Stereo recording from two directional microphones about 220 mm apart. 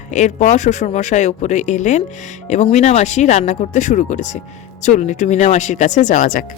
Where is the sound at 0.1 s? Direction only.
35° left (ahead or behind).